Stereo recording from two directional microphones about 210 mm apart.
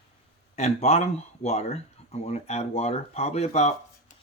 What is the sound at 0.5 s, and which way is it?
Speech, 30° left (ahead or behind).